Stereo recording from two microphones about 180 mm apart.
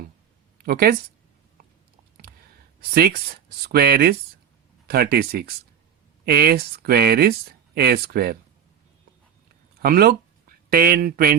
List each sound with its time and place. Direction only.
0.6 s speech: 55° right (ahead or behind)
2.9 s speech: 60° right (ahead or behind)
9.8 s speech: 55° right (ahead or behind)